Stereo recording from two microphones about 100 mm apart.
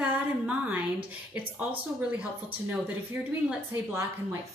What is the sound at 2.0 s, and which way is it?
A woman's voice, 10° right (ahead or behind).